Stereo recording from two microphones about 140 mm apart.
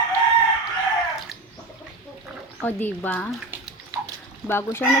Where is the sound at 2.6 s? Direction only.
15° left (ahead or behind).